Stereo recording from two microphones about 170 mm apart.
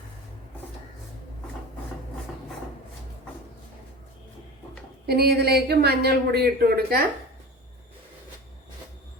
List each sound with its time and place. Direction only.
5.0 s speech: 70° right (ahead or behind)